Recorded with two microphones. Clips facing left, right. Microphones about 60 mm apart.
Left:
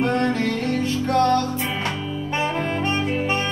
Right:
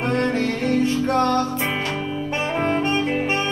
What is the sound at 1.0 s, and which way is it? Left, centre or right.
Music, right.